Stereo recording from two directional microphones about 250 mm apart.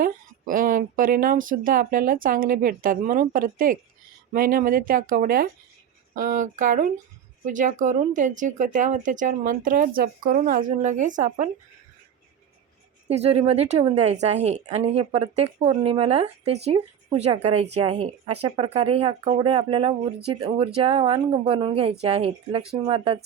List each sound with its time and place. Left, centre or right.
0.0 s speech: right
13.1 s a woman's voice: right